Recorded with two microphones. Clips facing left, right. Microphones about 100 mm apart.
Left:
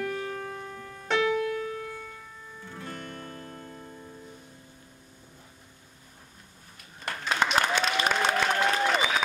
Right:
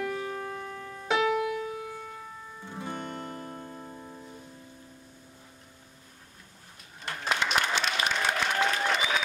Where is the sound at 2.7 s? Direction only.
20° right (ahead or behind).